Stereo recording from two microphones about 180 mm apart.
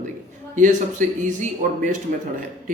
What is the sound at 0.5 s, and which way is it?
Speech, 45° right (ahead or behind).